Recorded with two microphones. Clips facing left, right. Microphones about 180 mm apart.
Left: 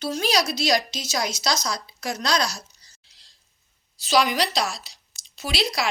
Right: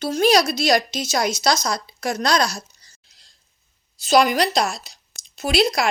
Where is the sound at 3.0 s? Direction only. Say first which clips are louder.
Right 2 dB; 50° right (ahead or behind).